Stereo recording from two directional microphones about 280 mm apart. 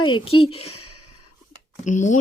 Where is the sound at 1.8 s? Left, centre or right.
Left.